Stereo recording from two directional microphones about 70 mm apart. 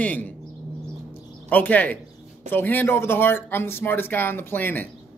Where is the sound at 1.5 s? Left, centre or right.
Left.